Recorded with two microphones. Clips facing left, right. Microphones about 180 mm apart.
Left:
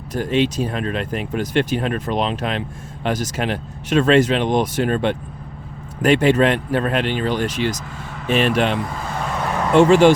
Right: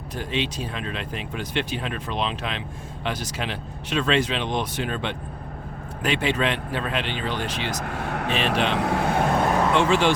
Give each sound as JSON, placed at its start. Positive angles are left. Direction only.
{"t": 0.1, "sound": "speech", "side_deg": 45}
{"t": 7.9, "sound": "speech", "side_deg": -65}
{"t": 8.3, "sound": "speech", "side_deg": 50}
{"t": 8.7, "sound": "speech", "side_deg": -70}
{"t": 9.7, "sound": "speech", "side_deg": 45}